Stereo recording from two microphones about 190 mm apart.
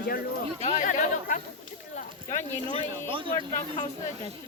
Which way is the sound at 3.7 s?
30° left (ahead or behind).